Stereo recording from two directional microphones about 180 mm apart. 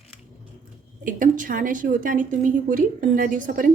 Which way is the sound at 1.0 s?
50° right (ahead or behind).